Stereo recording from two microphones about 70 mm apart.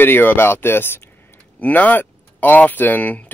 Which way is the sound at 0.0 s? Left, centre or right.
Left.